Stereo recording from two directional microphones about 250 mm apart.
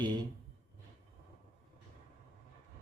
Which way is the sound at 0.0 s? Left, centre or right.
Centre.